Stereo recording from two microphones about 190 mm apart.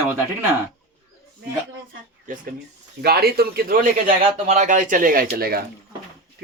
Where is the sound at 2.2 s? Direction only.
45° right (ahead or behind).